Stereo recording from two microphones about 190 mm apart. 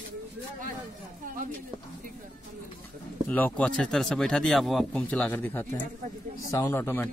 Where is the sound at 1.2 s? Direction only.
45° right (ahead or behind).